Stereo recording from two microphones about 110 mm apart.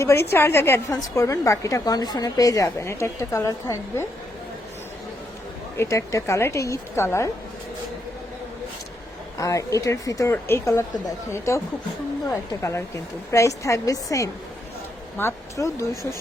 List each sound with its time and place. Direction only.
0.0 s a woman's voice: 25° left (ahead or behind)
5.7 s a woman's voice: 25° left (ahead or behind)
9.4 s a woman's voice: 30° left (ahead or behind)